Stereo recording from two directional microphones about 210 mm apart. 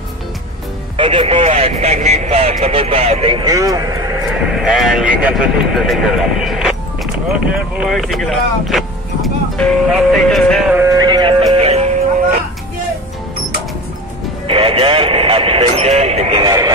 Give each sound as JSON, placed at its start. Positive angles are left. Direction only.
{"t": 0.9, "sound": "speech", "side_deg": -25}
{"t": 4.3, "sound": "speech", "side_deg": 0}
{"t": 7.7, "sound": "vehicle", "side_deg": -5}
{"t": 14.5, "sound": "radio", "side_deg": -25}